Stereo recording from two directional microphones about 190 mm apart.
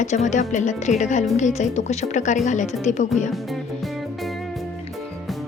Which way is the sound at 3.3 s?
Centre (ahead or behind).